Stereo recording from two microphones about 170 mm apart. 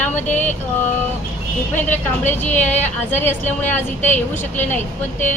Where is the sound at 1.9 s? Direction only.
10° left (ahead or behind).